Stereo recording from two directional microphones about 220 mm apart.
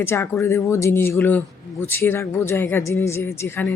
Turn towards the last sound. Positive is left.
turn(degrees=10)  # may be behind; listen again after turning